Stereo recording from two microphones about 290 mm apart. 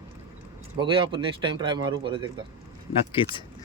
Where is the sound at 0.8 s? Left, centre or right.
Centre.